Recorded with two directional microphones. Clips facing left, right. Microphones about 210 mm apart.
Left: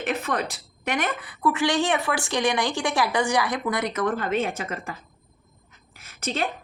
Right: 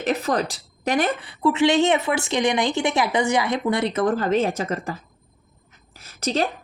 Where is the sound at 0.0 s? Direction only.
35° right (ahead or behind).